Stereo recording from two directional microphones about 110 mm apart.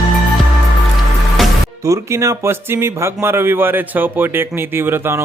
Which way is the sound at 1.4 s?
Centre (ahead or behind).